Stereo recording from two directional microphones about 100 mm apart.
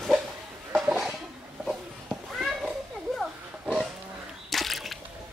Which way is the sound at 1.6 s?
5° right (ahead or behind).